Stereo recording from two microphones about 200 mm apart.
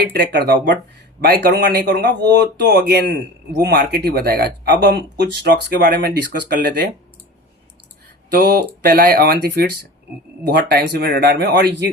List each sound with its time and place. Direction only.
0.2 s speech: 55° right (ahead or behind)
8.3 s speech: 50° right (ahead or behind)